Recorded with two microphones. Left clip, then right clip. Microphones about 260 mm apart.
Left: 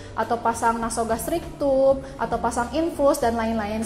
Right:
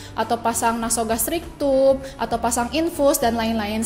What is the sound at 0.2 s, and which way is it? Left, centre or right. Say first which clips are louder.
A woman's voice: right 1 dB; right.